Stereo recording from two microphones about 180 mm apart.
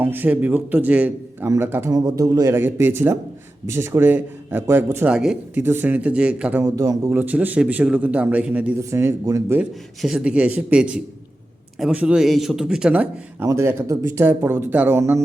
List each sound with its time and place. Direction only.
0.0 s a man's voice: 10° right (ahead or behind)
9.6 s a man's voice: centre (ahead or behind)